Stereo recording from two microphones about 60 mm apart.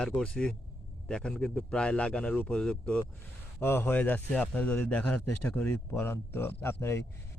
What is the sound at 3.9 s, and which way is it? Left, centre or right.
A man's voice, left.